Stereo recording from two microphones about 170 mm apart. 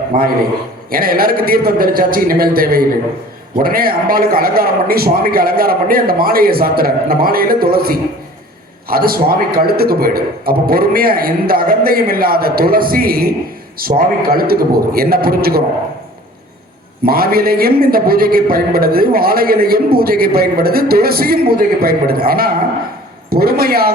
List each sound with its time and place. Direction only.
0.1 s speech: 55° right (ahead or behind)
17.0 s speech: 60° right (ahead or behind)